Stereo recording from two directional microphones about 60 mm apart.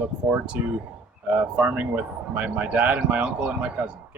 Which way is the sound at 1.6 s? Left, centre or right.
Right.